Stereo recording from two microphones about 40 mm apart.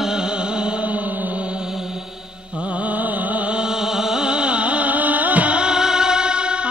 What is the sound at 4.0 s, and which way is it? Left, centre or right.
Music, centre.